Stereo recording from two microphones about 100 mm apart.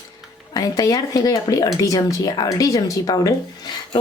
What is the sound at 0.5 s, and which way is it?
A woman's voice, 40° left (ahead or behind).